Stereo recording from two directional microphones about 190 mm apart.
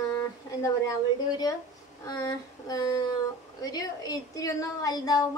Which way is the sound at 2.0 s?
20° left (ahead or behind).